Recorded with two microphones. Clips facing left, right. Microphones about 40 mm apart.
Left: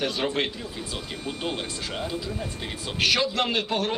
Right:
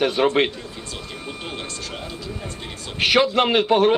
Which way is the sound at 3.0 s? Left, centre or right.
Right.